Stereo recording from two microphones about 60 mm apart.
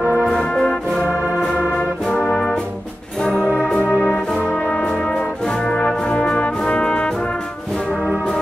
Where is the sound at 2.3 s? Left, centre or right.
Centre.